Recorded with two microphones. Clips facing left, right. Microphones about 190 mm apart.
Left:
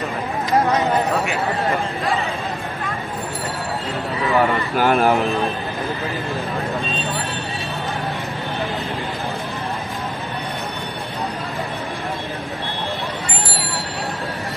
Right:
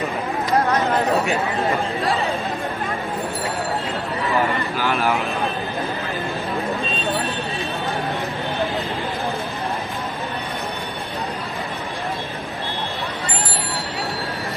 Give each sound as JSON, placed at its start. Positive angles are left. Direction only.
{"t": 4.4, "sound": "speech", "side_deg": 55}
{"t": 4.9, "sound": "speech", "side_deg": 35}